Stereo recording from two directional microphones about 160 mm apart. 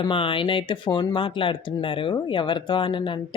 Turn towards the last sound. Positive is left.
turn(degrees=30)  # may be behind; listen again after turning